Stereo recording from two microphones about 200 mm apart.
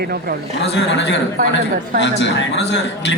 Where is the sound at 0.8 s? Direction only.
60° left (ahead or behind).